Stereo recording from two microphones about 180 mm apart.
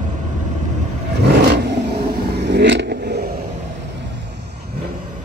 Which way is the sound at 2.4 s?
70° right (ahead or behind).